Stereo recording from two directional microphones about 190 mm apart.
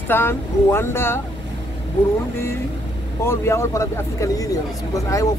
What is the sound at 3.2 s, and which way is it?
Speech, 15° left (ahead or behind).